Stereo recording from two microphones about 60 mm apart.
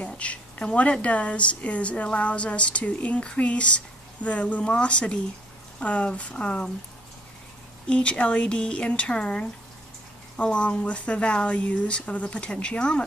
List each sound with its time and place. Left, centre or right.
0.0 s a woman's voice: left
7.9 s speech: centre